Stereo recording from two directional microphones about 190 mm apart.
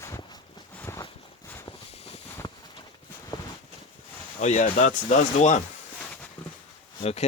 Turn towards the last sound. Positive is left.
turn(degrees=35)  # may be behind; listen again after turning